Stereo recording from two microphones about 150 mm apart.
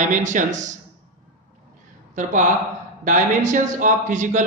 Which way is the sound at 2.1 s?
55° right (ahead or behind).